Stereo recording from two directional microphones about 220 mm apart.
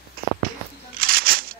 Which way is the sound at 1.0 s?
45° right (ahead or behind).